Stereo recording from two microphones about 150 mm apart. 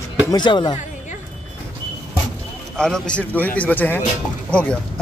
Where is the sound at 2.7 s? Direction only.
5° left (ahead or behind).